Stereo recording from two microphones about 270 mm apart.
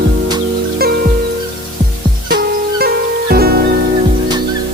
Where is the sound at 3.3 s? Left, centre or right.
Right.